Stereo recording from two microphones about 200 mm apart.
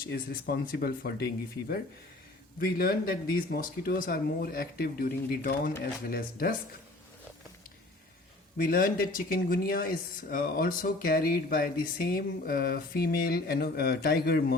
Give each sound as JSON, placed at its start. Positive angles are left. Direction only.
{"t": 0.0, "sound": "speech", "side_deg": 50}
{"t": 8.5, "sound": "speech", "side_deg": 45}